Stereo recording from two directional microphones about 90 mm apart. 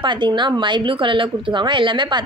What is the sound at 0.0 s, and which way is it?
Speech, 60° right (ahead or behind).